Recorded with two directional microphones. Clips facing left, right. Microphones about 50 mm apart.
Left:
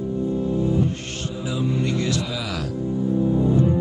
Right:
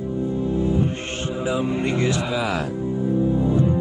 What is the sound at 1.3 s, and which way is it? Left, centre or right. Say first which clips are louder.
Speech: right 2 dB; right.